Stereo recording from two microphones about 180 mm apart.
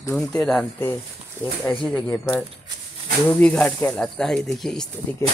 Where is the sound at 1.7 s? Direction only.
15° left (ahead or behind).